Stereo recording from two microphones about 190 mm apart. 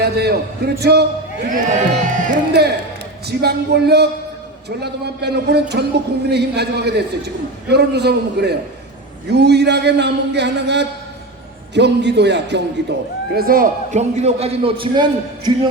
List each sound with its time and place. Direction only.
0.0 s speech: 55° right (ahead or behind)
1.6 s a man's voice: 40° right (ahead or behind)
2.3 s speech: 60° right (ahead or behind)
13.3 s a man's voice: 50° right (ahead or behind); by 15.5 s 25° right (ahead or behind)